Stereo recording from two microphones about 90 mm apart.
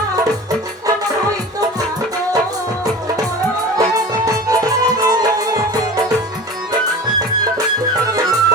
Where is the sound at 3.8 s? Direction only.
45° right (ahead or behind).